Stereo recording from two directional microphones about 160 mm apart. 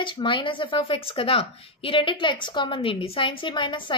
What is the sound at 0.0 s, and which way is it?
A woman's voice, 30° left (ahead or behind).